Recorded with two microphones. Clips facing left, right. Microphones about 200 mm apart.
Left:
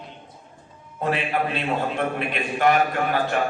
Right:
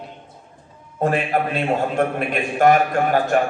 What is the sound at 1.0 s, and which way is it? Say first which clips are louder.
A man's voice: right 4 dB; 45° right (ahead or behind).